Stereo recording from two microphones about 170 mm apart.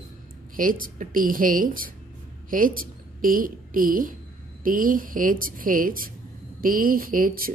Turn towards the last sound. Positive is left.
turn(degrees=-55)  # may be behind; listen again after turning